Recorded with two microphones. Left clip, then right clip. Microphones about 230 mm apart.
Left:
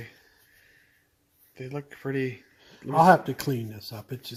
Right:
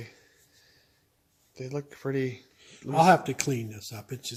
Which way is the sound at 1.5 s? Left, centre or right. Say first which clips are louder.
Right 1 dB; centre.